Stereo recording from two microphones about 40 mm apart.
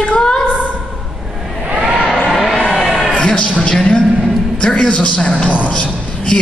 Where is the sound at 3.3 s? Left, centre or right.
Left.